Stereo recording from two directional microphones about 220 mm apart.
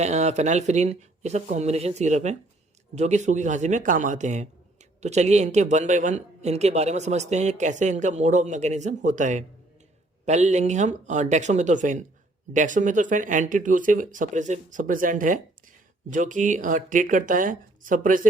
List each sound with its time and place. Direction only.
0.0 s speech: 30° right (ahead or behind)